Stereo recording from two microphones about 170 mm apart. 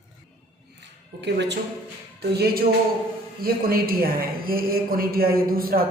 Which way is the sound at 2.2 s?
70° right (ahead or behind).